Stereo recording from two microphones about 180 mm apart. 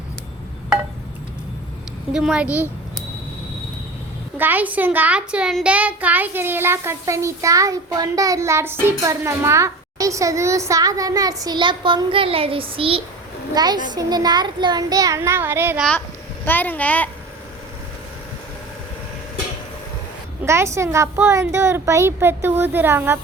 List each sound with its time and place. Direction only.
2.1 s a woman's voice: 5° right (ahead or behind)
4.4 s a child's voice: 10° right (ahead or behind)
15.8 s a woman's voice: 5° left (ahead or behind)
20.4 s a child's voice: 15° right (ahead or behind)